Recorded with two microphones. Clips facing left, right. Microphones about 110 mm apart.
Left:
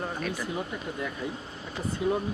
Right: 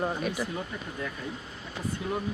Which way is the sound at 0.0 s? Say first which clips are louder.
Right 3 dB; 10° right (ahead or behind).